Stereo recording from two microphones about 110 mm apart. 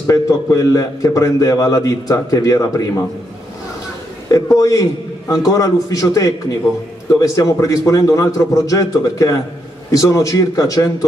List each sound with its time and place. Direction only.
0.0 s a man's voice: 30° left (ahead or behind)
4.3 s a man's voice: 30° left (ahead or behind)